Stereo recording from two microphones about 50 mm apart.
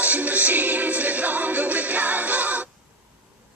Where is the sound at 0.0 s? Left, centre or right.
Right.